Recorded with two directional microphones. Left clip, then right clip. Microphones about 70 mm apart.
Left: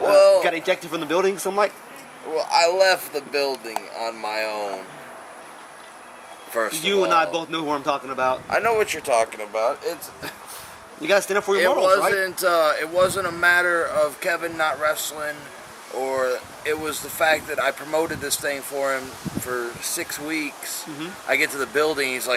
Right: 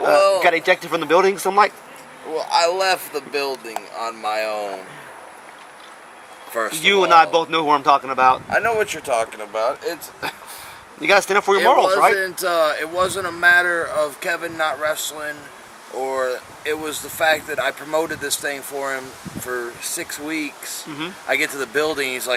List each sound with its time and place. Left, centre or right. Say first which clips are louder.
0.1 s a sound: left 1 dB; centre
0.4 s a man's voice: right 6 dB; right
2.3 s speech: right 1 dB; centre
6.5 s speech: right 1 dB; centre
6.8 s a man's voice: right 7 dB; right
8.4 s speech: right 1 dB; centre
11.0 s a man's voice: right 4 dB; right
12.1 s speech: right 1 dB; centre